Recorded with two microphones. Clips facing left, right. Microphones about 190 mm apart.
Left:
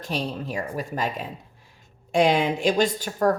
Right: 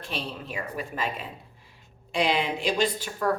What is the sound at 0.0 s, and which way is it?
Speech, 40° left (ahead or behind).